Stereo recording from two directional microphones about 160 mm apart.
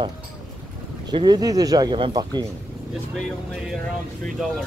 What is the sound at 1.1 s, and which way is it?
Speech, 25° right (ahead or behind).